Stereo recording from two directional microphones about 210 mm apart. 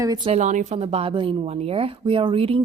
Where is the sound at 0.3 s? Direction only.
35° right (ahead or behind).